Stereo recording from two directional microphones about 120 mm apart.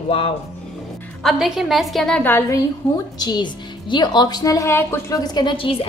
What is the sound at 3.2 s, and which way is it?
A woman's voice, 35° left (ahead or behind).